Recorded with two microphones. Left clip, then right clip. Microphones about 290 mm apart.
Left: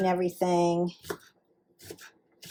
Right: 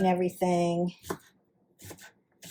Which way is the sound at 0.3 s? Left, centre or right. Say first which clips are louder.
Left 2 dB; left.